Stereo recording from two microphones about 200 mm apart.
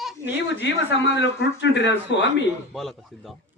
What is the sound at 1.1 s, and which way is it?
A man's voice, 65° left (ahead or behind).